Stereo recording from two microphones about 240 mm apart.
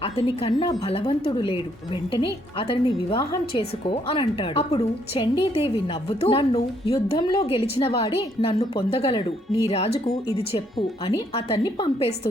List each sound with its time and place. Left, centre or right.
0.0 s a woman's voice: left